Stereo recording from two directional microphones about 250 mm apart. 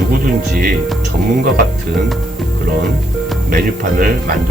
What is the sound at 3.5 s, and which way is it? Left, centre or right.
Speech, right.